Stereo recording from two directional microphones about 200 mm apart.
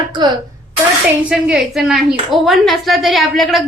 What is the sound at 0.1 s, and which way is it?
Throat clearing, 20° right (ahead or behind).